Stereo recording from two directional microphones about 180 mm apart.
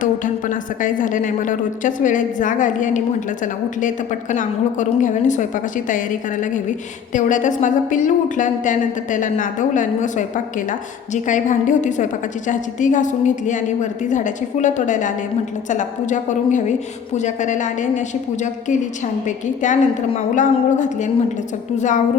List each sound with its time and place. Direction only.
0.0 s a woman's voice: 45° left (ahead or behind)